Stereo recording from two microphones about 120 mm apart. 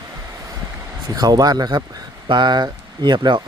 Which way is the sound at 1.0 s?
35° right (ahead or behind).